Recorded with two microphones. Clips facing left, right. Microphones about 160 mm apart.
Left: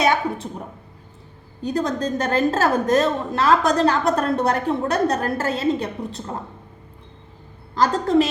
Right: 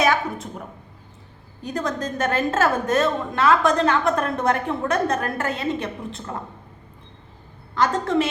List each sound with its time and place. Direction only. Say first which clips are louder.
0.0 s a sound: left 1 dB; 25° left (ahead or behind)
1.6 s a woman's voice: left 4 dB; 30° left (ahead or behind)
7.8 s a woman's voice: left 3 dB; 35° left (ahead or behind)